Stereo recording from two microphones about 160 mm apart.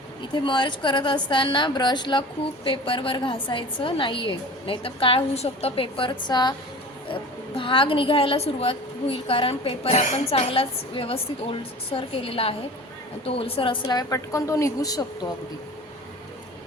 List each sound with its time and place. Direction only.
0.3 s a woman's voice: 30° left (ahead or behind)
13.8 s speech: 20° left (ahead or behind)